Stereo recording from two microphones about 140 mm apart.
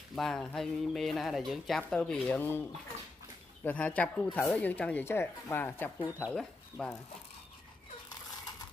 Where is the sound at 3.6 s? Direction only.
10° left (ahead or behind).